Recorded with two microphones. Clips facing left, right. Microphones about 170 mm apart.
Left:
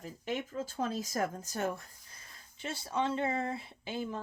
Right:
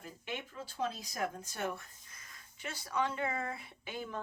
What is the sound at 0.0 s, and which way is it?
Speech, 40° left (ahead or behind).